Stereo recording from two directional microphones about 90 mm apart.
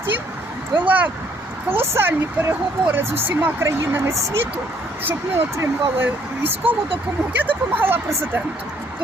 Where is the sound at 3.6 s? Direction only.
30° right (ahead or behind).